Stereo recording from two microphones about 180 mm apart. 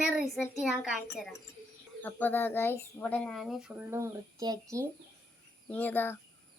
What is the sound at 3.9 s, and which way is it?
Speech, 20° right (ahead or behind).